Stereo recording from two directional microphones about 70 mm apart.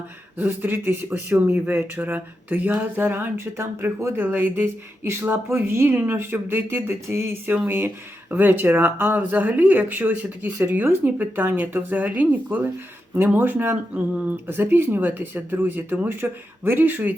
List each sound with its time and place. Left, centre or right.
0.3 s speech: right